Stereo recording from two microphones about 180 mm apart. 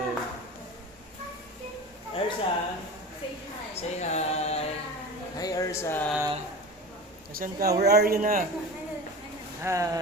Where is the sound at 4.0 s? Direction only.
40° left (ahead or behind).